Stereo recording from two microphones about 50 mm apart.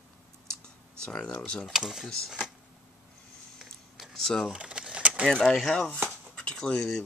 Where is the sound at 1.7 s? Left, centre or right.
Centre.